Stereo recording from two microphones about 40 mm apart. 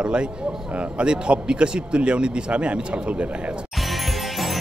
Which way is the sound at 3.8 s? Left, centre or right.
Centre.